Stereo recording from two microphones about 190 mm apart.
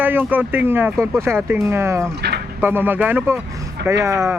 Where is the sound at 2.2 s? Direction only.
60° right (ahead or behind).